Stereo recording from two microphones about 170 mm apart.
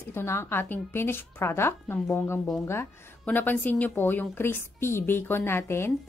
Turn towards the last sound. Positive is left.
turn(degrees=15)  # may be behind; listen again after turning